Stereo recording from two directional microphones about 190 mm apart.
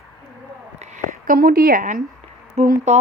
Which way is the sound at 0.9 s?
50° right (ahead or behind).